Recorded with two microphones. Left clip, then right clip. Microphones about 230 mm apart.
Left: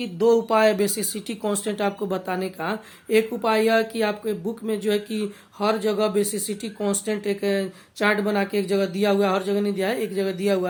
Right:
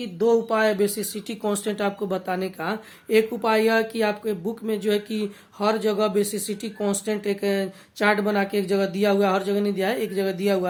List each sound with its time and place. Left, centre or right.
0.0 s speech: left
1.3 s speech: centre